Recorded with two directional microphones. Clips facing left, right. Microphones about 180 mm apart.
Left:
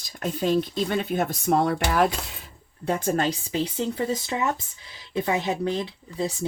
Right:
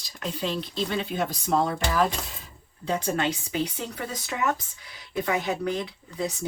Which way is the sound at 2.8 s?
50° left (ahead or behind).